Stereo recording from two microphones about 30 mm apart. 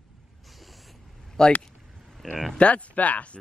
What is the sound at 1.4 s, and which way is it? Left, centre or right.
Speech, left.